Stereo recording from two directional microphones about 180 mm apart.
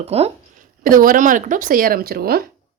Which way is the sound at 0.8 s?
50° right (ahead or behind).